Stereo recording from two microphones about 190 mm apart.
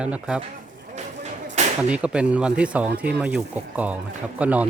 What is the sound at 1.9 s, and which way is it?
Speech, 5° right (ahead or behind).